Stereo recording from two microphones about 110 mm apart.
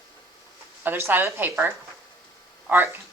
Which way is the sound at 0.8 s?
20° right (ahead or behind).